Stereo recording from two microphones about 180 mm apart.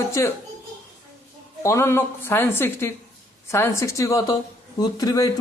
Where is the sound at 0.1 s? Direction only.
15° left (ahead or behind).